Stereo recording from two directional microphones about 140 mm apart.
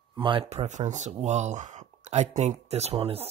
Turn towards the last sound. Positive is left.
turn(degrees=-45)  # may be behind; listen again after turning